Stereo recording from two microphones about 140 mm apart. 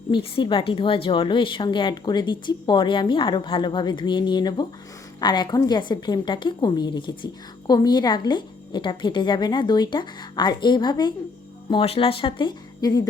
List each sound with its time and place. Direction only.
0.1 s a woman's voice: 40° left (ahead or behind)